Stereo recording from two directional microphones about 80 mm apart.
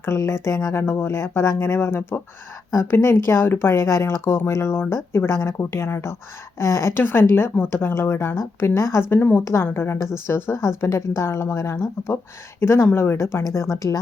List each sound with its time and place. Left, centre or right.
0.0 s a woman's voice: left
0.7 s a woman's voice: left
6.9 s a woman's voice: left